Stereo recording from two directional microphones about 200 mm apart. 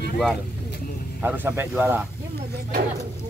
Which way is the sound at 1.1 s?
10° right (ahead or behind).